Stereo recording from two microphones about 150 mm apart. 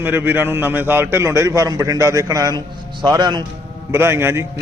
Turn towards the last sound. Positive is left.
turn(degrees=-15)  # may be behind; listen again after turning